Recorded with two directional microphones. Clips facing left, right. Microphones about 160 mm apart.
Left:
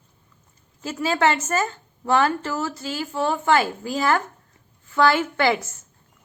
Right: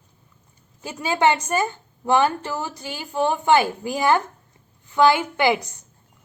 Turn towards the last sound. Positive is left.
turn(degrees=-15)  # may be behind; listen again after turning